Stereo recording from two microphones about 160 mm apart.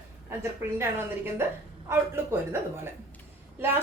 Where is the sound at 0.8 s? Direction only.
15° right (ahead or behind).